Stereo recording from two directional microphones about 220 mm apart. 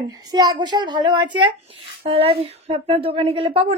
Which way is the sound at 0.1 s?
15° right (ahead or behind).